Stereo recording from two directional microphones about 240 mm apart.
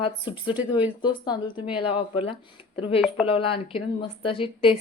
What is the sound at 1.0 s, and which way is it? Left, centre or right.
A woman's voice, centre.